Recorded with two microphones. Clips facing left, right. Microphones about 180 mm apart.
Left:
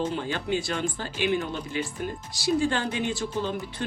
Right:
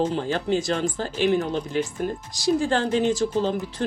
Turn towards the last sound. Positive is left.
turn(degrees=-45)  # may be behind; listen again after turning